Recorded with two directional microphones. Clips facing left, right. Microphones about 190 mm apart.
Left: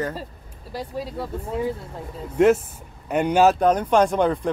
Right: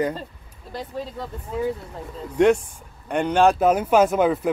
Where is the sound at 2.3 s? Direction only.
5° left (ahead or behind).